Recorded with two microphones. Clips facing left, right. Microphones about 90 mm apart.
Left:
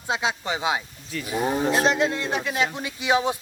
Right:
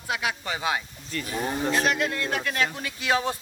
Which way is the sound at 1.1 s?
5° left (ahead or behind).